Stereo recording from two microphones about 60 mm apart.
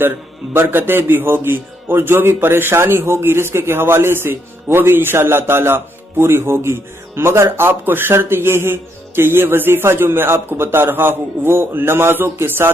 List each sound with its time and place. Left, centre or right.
0.0 s a man's voice: right